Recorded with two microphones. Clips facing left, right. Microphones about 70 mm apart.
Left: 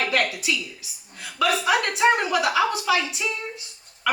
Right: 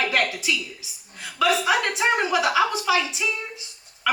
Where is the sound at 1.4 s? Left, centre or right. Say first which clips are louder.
Right 1 dB; right.